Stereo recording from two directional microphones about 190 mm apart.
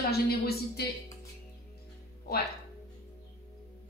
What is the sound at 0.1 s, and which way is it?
Speech, 55° left (ahead or behind).